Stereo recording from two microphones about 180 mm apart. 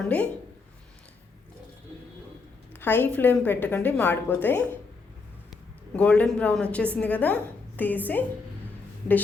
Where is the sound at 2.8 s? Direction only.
10° left (ahead or behind).